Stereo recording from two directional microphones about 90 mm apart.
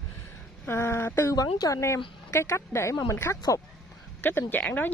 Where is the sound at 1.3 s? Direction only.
45° left (ahead or behind).